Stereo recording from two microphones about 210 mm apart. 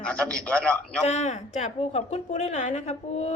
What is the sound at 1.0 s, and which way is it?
A woman's voice, 35° left (ahead or behind).